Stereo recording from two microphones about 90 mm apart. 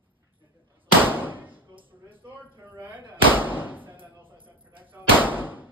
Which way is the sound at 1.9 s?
20° right (ahead or behind).